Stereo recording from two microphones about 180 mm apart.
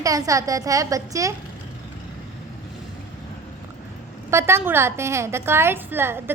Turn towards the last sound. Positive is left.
turn(degrees=-10)  # may be behind; listen again after turning